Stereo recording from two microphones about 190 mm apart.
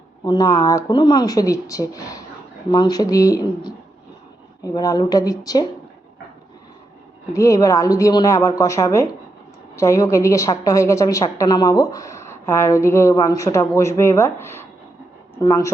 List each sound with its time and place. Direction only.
0.3 s speech: 20° left (ahead or behind)
7.3 s a woman's voice: 15° left (ahead or behind)